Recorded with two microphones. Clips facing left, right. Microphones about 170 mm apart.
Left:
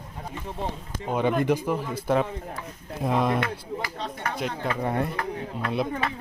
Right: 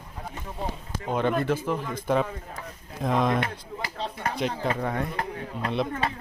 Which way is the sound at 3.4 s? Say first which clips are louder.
Left 3 dB; 25° right (ahead or behind).